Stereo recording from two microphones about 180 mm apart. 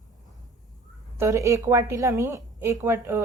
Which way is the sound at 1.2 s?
15° right (ahead or behind).